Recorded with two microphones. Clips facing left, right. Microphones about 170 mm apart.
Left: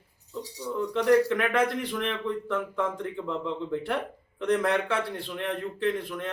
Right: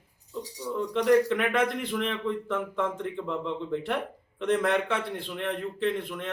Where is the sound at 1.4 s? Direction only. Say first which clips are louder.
Left 1 dB; centre (ahead or behind).